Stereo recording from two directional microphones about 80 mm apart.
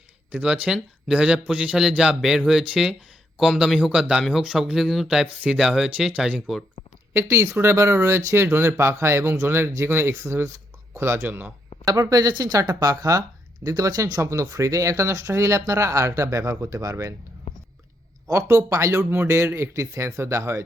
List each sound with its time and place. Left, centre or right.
0.3 s speech: centre
6.1 s speech: centre
7.1 s speech: right
11.3 s speech: right
11.9 s speech: right
14.2 s speech: right
18.3 s speech: right